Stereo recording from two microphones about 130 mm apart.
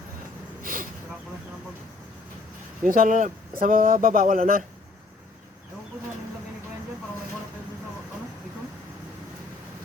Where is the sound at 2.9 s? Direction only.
90° right.